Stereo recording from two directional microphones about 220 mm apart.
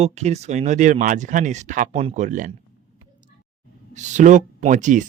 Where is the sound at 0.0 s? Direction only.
30° right (ahead or behind).